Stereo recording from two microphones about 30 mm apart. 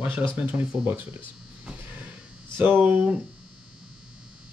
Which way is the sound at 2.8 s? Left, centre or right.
Right.